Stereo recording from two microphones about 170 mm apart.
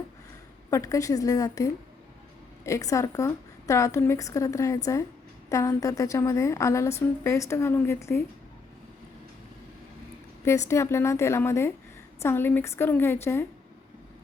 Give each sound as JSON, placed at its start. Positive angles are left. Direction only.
{"t": 0.7, "sound": "a woman's voice", "side_deg": 20}
{"t": 10.4, "sound": "a woman's voice", "side_deg": 15}